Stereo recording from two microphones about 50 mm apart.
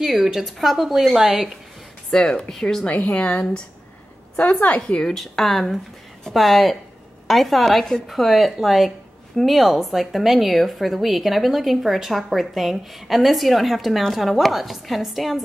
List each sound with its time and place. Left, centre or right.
0.0 s a woman's voice: centre
2.0 s speech: centre
2.9 s a woman's voice: left
4.8 s a woman's voice: centre